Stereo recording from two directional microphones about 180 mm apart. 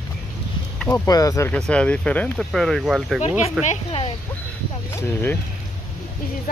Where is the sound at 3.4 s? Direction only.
35° left (ahead or behind).